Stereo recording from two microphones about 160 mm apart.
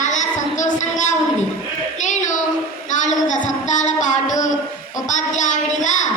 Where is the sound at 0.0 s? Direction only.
50° left (ahead or behind).